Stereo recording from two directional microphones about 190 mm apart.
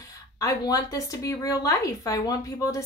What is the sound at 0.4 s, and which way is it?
A woman's voice, 20° left (ahead or behind).